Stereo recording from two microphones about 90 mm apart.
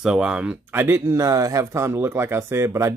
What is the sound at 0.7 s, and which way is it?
Speech, 25° right (ahead or behind).